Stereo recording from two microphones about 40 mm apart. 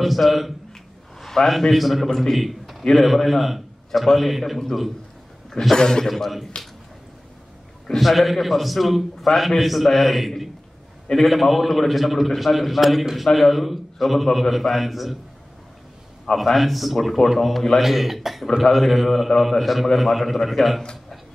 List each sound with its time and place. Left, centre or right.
0.0 s a man's voice: centre
1.2 s a sound: centre
1.6 s a man's voice: centre
6.0 s a man's voice: centre
8.0 s a man's voice: centre
16.3 s a man's voice: centre